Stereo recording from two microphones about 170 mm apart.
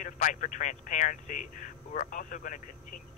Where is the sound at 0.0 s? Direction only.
45° left (ahead or behind).